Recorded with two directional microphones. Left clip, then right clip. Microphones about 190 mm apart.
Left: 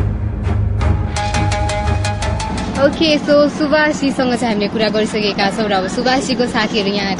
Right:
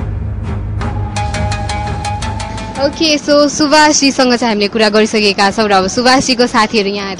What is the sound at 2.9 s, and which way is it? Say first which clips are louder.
A woman's voice: right 5 dB; 45° right (ahead or behind).